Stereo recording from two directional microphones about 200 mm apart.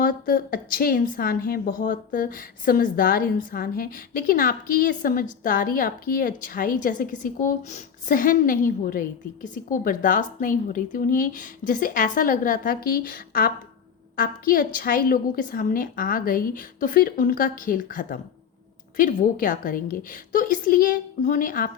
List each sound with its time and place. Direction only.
0.0 s a woman's voice: 45° left (ahead or behind)